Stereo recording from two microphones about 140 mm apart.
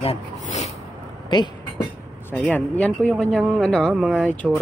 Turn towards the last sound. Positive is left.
turn(degrees=10)  # may be behind; listen again after turning